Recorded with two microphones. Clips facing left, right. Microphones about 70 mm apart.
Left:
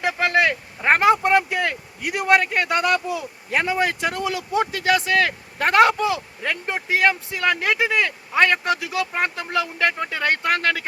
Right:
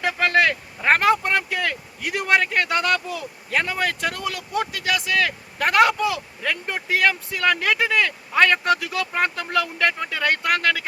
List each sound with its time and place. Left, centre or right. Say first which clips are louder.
0.0 s speech: even; centre